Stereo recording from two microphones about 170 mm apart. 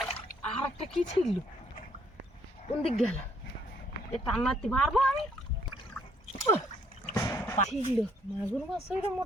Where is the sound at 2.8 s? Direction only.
35° left (ahead or behind).